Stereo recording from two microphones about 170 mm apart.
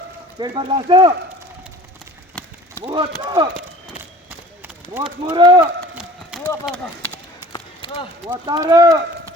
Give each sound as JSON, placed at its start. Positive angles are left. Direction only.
{"t": 0.3, "sound": "speech", "side_deg": -25}
{"t": 2.4, "sound": "a sound", "side_deg": 5}
{"t": 2.8, "sound": "speech", "side_deg": -30}
{"t": 4.9, "sound": "speech", "side_deg": -10}
{"t": 5.3, "sound": "speech", "side_deg": -25}
{"t": 5.9, "sound": "run", "side_deg": -5}
{"t": 7.5, "sound": "a sound", "side_deg": 30}
{"t": 8.3, "sound": "speech", "side_deg": -25}